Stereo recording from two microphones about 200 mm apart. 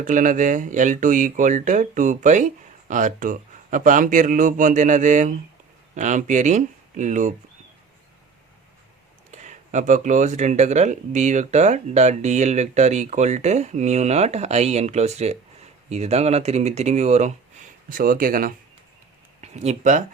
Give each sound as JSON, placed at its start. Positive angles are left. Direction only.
{"t": 0.0, "sound": "speech", "side_deg": -40}
{"t": 9.3, "sound": "speech", "side_deg": -35}